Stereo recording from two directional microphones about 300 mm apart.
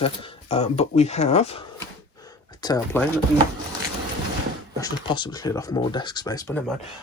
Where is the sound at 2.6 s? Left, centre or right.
Centre.